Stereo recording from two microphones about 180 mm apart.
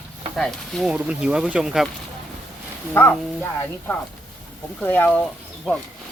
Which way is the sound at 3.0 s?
10° left (ahead or behind).